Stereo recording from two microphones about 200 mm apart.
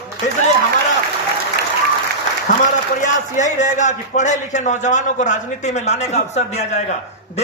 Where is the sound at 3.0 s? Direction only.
40° left (ahead or behind).